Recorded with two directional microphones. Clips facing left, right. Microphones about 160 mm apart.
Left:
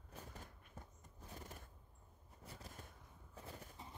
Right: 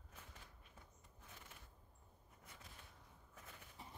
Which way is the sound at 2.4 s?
35° left (ahead or behind).